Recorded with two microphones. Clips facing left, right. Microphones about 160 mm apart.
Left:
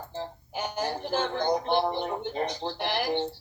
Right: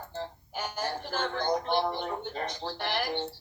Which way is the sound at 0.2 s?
15° left (ahead or behind).